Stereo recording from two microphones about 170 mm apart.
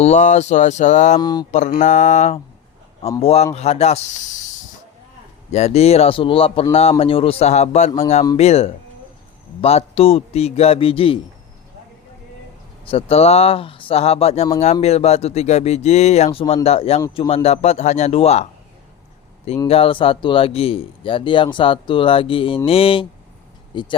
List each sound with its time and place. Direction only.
0.0 s speech: 45° left (ahead or behind)
1.2 s mantra: 25° left (ahead or behind)
1.5 s a man's voice: 45° left (ahead or behind)
5.5 s a man's voice: 40° left (ahead or behind)
12.8 s a man's voice: 35° left (ahead or behind)
19.6 s a man's voice: 35° left (ahead or behind)
23.7 s mantra: 30° left (ahead or behind)